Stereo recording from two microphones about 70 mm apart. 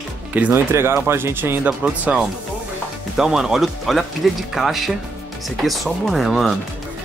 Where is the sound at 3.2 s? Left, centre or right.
Centre.